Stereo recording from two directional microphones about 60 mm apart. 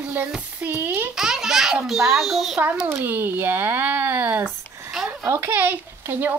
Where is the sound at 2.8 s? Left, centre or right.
Right.